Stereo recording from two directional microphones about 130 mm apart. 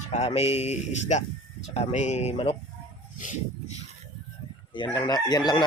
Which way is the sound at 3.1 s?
80° left.